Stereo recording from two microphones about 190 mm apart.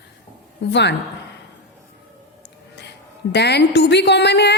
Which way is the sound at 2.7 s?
60° left (ahead or behind).